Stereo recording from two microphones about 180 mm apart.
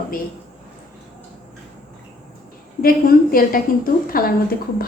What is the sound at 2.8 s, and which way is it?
A woman's voice, 55° left (ahead or behind).